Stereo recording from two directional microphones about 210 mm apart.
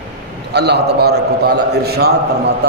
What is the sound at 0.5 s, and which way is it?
Speech, 50° right (ahead or behind).